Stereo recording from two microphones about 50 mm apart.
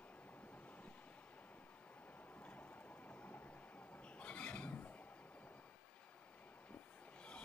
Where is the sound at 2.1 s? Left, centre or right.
Left.